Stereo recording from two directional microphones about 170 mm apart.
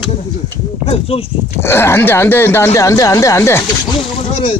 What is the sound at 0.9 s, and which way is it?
Speech, 35° left (ahead or behind).